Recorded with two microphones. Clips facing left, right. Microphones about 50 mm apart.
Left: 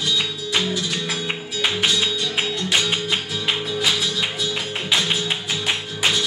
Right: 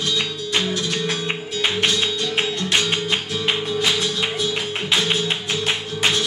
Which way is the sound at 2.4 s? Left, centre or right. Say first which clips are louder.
Even; centre.